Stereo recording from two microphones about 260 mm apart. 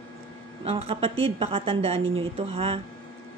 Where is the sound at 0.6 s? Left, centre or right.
Right.